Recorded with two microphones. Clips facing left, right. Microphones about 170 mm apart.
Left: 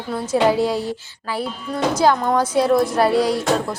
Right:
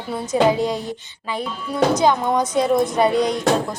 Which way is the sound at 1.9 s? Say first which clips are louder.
Left 1 dB; centre (ahead or behind).